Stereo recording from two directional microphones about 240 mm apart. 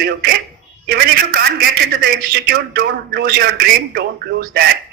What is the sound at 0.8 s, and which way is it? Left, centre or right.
A man's voice, right.